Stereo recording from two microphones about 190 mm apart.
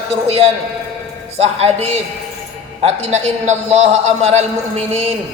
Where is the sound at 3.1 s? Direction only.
35° right (ahead or behind).